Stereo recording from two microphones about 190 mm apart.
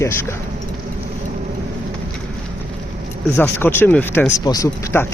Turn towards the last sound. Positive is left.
turn(degrees=15)  # may be behind; listen again after turning